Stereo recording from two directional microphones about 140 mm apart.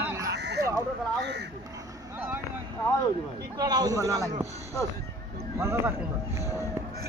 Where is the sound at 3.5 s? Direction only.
30° right (ahead or behind).